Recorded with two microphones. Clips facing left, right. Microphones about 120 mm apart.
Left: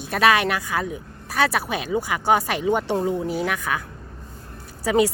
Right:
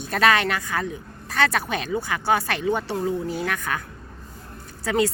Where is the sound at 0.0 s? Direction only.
5° left (ahead or behind).